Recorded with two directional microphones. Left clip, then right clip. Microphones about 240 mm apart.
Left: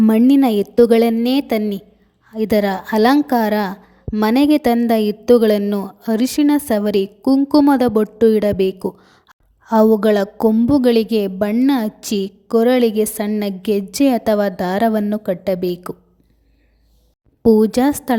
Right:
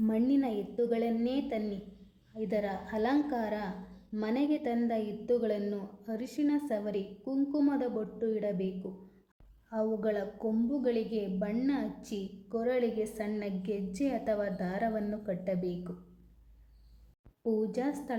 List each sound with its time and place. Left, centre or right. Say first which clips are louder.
0.0 s a woman's voice: left 17 dB; left
17.4 s a woman's voice: left 19 dB; left